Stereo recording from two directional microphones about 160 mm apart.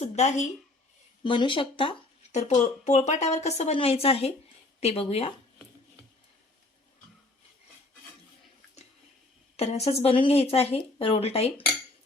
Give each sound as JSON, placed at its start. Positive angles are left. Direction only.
{"t": 0.0, "sound": "a sound", "side_deg": 45}
{"t": 1.2, "sound": "speech", "side_deg": 30}
{"t": 2.5, "sound": "a woman's voice", "side_deg": 45}
{"t": 9.6, "sound": "speech", "side_deg": 40}